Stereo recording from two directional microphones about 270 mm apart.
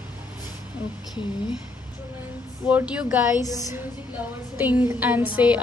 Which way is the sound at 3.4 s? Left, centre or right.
Centre.